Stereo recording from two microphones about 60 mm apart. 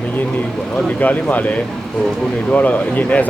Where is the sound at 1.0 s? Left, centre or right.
Left.